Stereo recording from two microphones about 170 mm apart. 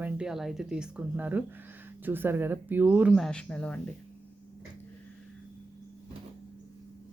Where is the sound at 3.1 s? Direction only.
5° left (ahead or behind).